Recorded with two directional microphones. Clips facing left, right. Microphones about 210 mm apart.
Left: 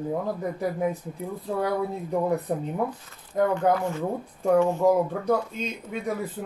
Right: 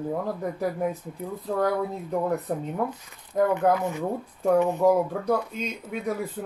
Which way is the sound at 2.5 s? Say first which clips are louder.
Left 1 dB; 15° left (ahead or behind).